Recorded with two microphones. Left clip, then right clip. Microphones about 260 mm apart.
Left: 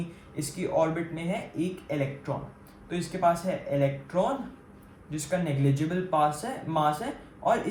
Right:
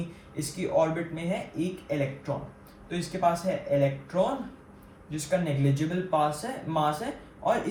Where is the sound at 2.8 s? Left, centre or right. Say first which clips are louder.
Left 1 dB; left.